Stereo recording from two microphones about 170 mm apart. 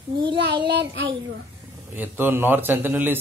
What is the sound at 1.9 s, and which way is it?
A child's voice, 10° right (ahead or behind).